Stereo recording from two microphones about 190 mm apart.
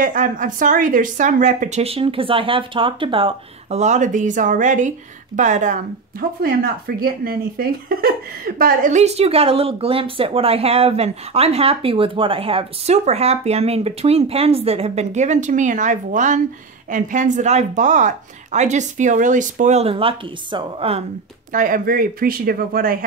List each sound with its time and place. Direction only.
0.0 s speech: 45° right (ahead or behind)
6.4 s speech: 50° right (ahead or behind); by 21.0 s 30° right (ahead or behind)
21.5 s speech: 45° right (ahead or behind)